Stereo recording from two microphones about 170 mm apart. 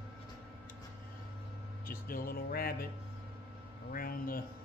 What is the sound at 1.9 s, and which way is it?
Speech, 55° left (ahead or behind).